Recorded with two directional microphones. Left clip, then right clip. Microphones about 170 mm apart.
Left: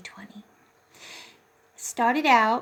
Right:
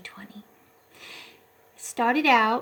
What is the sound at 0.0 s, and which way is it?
Whispering, centre (ahead or behind).